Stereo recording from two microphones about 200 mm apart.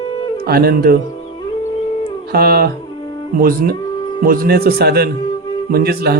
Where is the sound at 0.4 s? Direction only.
50° right (ahead or behind).